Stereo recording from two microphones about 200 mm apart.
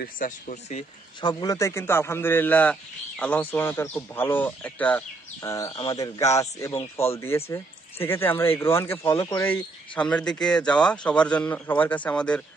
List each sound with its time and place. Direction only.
0.0 s speech: 40° left (ahead or behind)
1.2 s speech: 20° left (ahead or behind)
5.7 s speech: 25° left (ahead or behind)
5.9 s speech: 15° left (ahead or behind)